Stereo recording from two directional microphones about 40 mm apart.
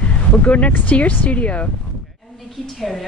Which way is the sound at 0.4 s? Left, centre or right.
Left.